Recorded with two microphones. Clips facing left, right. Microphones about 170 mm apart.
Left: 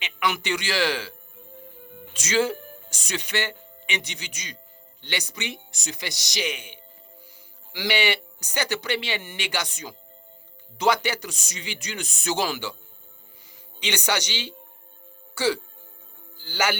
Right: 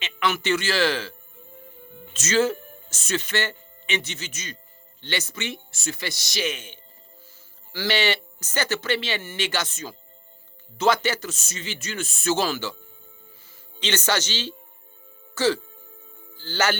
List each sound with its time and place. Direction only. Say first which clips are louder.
0.0 s speech: right 2 dB; 15° left (ahead or behind)
2.1 s speech: right 2 dB; 15° left (ahead or behind)
13.7 s speech: right 2 dB; 15° left (ahead or behind)